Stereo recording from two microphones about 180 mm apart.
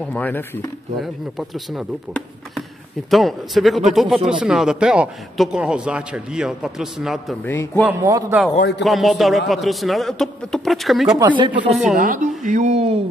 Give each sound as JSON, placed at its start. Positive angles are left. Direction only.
{"t": 0.0, "sound": "speech", "side_deg": 10}
{"t": 1.0, "sound": "a man's voice", "side_deg": 0}
{"t": 3.1, "sound": "a man's voice", "side_deg": 0}
{"t": 7.4, "sound": "speech", "side_deg": 10}
{"t": 7.8, "sound": "a man's voice", "side_deg": -15}
{"t": 8.5, "sound": "speech", "side_deg": 60}
{"t": 8.8, "sound": "a man's voice", "side_deg": 0}
{"t": 11.1, "sound": "speech", "side_deg": -25}
{"t": 11.7, "sound": "a man's voice", "side_deg": 0}
{"t": 12.0, "sound": "speech", "side_deg": -45}